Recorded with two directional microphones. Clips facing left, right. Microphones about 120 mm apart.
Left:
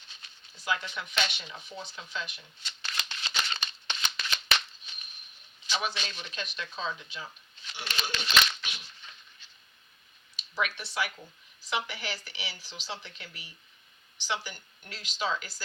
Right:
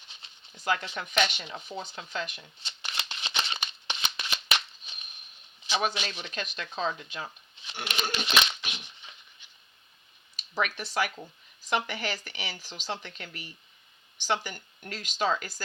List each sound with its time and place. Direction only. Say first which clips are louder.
0.2 s a sound: even; 25° right (ahead or behind)
0.6 s speech: right 3 dB; 50° right (ahead or behind)
2.6 s shuffling cards: right 1 dB; 25° right (ahead or behind)
6.1 s speech: right 3 dB; 45° right (ahead or behind)
7.5 s shuffling cards: right 1 dB; 20° right (ahead or behind)
8.1 s a sound: even; 20° right (ahead or behind)
10.3 s speech: right 2 dB; 45° right (ahead or behind)